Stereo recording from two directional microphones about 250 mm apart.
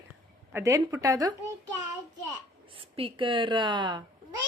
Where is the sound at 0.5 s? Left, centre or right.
Centre.